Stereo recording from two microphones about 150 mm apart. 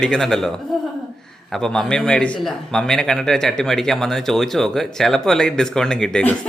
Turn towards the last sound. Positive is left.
turn(degrees=5)  # may be behind; listen again after turning